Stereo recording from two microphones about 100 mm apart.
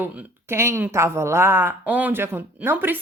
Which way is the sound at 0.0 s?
20° right (ahead or behind).